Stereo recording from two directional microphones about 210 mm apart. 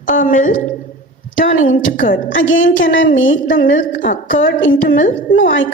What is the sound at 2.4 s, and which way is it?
Speech, 70° left (ahead or behind).